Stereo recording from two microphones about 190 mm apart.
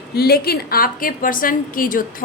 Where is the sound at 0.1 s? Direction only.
55° left (ahead or behind).